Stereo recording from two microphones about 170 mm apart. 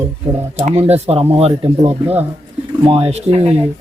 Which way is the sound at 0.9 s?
35° right (ahead or behind).